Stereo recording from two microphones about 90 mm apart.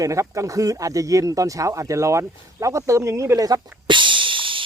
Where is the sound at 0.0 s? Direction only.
35° right (ahead or behind).